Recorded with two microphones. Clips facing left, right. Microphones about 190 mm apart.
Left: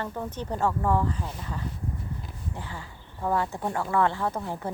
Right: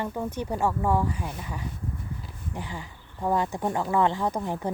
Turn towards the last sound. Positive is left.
turn(degrees=-15)  # may be behind; listen again after turning